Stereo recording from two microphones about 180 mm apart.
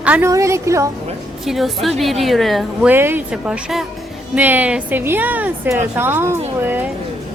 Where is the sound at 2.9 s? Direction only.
10° right (ahead or behind).